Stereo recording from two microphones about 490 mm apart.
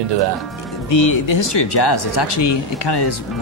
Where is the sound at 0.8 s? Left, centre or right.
Left.